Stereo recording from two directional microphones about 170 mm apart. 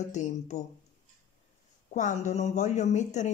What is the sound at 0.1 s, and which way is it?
Speech, 45° left (ahead or behind).